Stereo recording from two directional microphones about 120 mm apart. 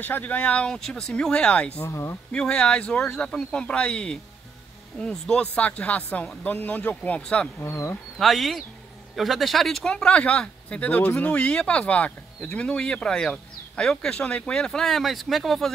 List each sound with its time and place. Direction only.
0.0 s speech: 15° left (ahead or behind)
1.8 s speech: 25° left (ahead or behind)
2.3 s speech: 5° left (ahead or behind)
7.6 s speech: 20° left (ahead or behind)
8.2 s speech: centre (ahead or behind)